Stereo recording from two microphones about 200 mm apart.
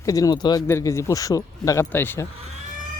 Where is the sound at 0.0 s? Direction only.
15° left (ahead or behind).